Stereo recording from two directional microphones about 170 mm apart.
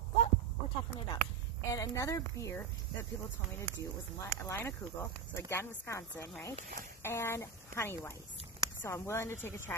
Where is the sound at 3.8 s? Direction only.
20° left (ahead or behind).